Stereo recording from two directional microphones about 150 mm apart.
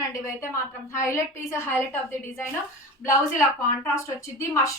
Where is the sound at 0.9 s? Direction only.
20° left (ahead or behind).